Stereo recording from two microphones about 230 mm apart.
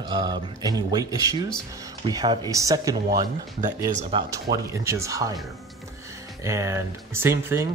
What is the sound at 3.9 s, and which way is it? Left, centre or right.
Speech, right.